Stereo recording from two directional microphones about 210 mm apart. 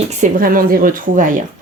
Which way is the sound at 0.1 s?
40° right (ahead or behind).